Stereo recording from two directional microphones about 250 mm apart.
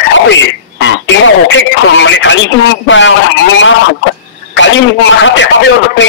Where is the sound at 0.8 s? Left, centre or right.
Left.